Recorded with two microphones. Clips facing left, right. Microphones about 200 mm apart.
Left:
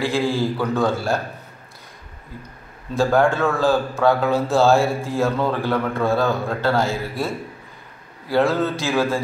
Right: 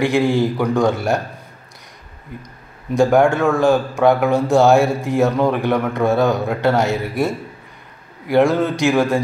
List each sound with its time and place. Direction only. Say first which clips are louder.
0.0 s a man's voice: right 5 dB; 20° right (ahead or behind)
2.9 s a man's voice: right 4 dB; 15° right (ahead or behind)